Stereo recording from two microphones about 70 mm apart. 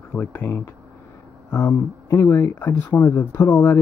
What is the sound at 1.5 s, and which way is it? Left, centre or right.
Speech, left.